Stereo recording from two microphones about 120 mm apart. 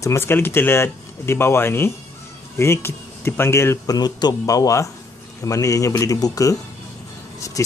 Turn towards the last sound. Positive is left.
turn(degrees=30)  # may be behind; listen again after turning